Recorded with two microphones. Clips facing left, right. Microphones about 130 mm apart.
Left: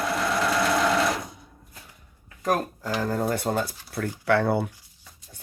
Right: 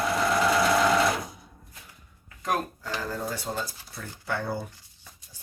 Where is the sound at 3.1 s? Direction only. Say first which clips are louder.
Left 9 dB; 55° left (ahead or behind).